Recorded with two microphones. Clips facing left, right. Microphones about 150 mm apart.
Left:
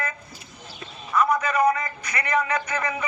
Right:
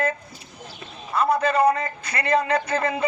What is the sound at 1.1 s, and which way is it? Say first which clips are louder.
A man's voice: right 2 dB; 30° right (ahead or behind).